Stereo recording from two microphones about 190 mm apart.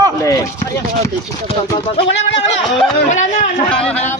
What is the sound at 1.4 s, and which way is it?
Speech, 30° left (ahead or behind).